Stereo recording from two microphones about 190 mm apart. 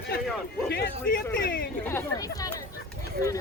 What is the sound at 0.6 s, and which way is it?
A man's voice, 55° left (ahead or behind).